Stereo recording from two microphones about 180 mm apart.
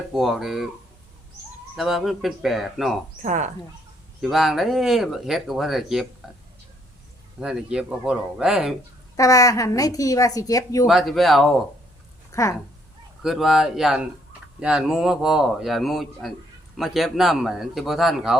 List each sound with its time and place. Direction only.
0.1 s speech: centre (ahead or behind)
1.7 s speech: centre (ahead or behind)
3.2 s speech: 40° right (ahead or behind)
4.2 s speech: centre (ahead or behind)
7.3 s speech: 5° right (ahead or behind)
9.1 s a woman's voice: 20° left (ahead or behind)
10.8 s speech: centre (ahead or behind)
12.3 s speech: 15° left (ahead or behind)
13.2 s speech: centre (ahead or behind)